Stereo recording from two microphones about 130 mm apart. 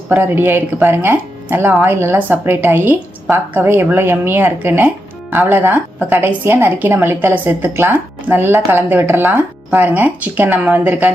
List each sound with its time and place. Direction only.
0.1 s a woman's voice: 15° right (ahead or behind)